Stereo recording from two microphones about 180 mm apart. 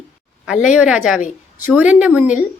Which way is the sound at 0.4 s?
5° right (ahead or behind).